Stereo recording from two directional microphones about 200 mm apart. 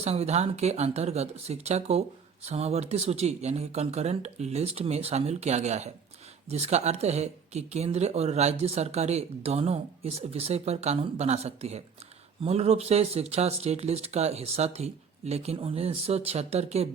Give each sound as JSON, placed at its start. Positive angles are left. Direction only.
{"t": 0.0, "sound": "speech", "side_deg": -30}